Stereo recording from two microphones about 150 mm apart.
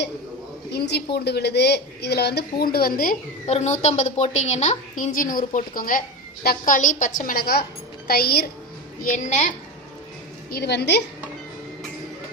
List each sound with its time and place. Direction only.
0.7 s a woman's voice: 90° left
3.4 s a woman's voice: 50° left (ahead or behind); by 8.4 s 90° left
9.1 s a woman's voice: 55° left (ahead or behind)
10.5 s a woman's voice: 90° left